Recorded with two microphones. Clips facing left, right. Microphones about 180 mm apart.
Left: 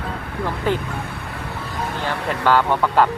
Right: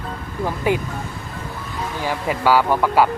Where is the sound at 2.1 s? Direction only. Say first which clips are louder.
Right 1 dB; 10° right (ahead or behind).